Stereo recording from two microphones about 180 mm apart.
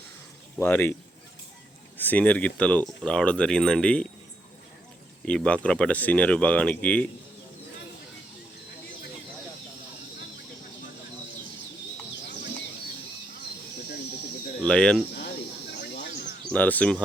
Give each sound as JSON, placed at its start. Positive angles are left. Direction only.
{"t": 0.5, "sound": "speech", "side_deg": 10}
{"t": 2.0, "sound": "speech", "side_deg": 10}
{"t": 5.2, "sound": "speech", "side_deg": 5}
{"t": 14.6, "sound": "speech", "side_deg": 5}
{"t": 15.8, "sound": "a sound", "side_deg": 65}
{"t": 16.5, "sound": "speech", "side_deg": 10}